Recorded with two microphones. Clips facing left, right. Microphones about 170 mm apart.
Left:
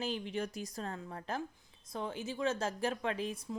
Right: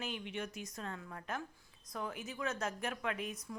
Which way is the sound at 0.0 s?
35° left (ahead or behind).